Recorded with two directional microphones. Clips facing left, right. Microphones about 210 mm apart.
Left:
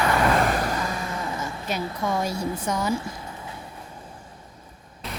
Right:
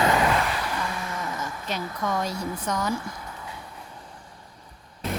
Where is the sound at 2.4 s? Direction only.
25° left (ahead or behind).